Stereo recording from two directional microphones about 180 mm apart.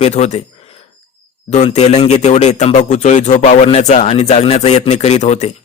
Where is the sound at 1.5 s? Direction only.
40° left (ahead or behind).